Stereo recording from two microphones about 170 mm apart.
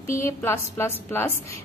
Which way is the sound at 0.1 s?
15° left (ahead or behind).